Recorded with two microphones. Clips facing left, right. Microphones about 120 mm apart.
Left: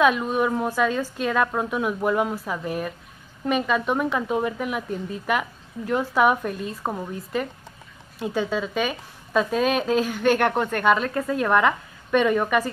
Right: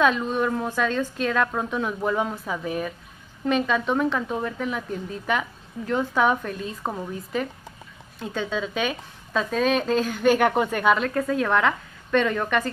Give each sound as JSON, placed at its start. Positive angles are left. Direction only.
{"t": 0.0, "sound": "a woman's voice", "side_deg": 10}